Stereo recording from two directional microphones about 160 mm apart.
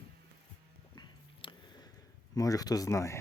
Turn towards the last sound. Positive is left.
turn(degrees=20)  # may be behind; listen again after turning